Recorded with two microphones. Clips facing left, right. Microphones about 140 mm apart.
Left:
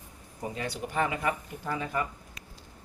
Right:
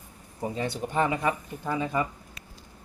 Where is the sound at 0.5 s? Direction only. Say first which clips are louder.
Right 4 dB; 25° right (ahead or behind).